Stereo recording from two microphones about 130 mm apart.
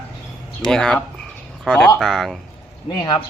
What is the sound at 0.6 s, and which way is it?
Speech, 5° left (ahead or behind).